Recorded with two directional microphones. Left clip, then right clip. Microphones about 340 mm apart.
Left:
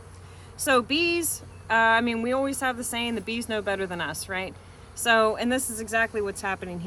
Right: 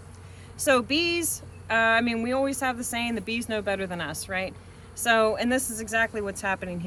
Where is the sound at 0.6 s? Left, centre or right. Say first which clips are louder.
Even; centre.